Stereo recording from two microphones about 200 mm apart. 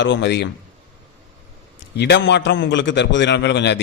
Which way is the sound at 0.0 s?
60° left (ahead or behind).